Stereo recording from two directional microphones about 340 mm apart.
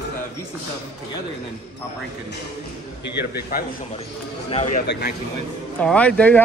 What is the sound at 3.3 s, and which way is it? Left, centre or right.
A man's voice, left.